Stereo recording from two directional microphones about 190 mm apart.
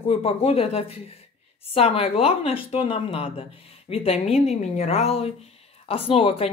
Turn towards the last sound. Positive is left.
turn(degrees=30)  # may be behind; listen again after turning